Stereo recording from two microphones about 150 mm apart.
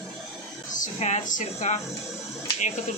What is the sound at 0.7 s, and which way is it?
Speech, 55° left (ahead or behind).